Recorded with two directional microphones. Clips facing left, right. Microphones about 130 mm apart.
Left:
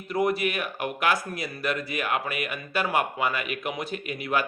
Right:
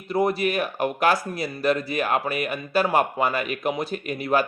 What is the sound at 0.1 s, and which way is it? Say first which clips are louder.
Speech: right 3 dB; 30° right (ahead or behind).